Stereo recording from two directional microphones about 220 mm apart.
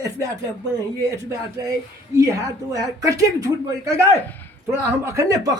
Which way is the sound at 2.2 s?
15° right (ahead or behind).